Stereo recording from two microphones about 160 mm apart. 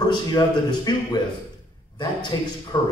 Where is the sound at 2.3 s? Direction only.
25° left (ahead or behind).